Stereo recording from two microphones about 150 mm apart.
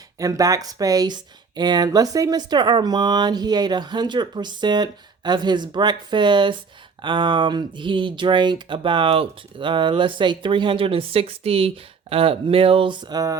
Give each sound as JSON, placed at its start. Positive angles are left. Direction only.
{"t": 0.2, "sound": "speech", "side_deg": -25}